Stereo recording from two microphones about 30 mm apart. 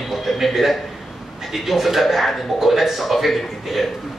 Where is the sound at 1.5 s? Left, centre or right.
Centre.